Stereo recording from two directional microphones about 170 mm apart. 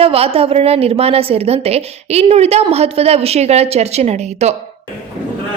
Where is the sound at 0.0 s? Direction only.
35° right (ahead or behind).